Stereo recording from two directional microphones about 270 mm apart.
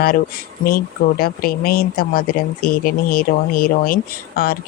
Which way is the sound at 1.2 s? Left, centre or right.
Left.